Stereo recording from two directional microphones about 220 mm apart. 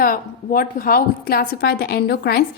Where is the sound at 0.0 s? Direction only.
40° left (ahead or behind).